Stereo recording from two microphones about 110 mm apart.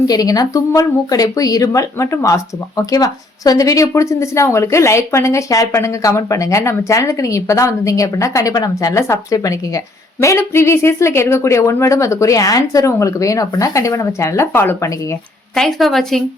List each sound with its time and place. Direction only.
0.1 s speech: 35° left (ahead or behind)
15.5 s a woman's voice: centre (ahead or behind)